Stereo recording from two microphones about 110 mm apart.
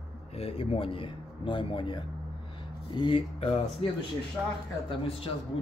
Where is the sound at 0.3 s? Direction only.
65° left (ahead or behind); by 3.3 s 45° left (ahead or behind).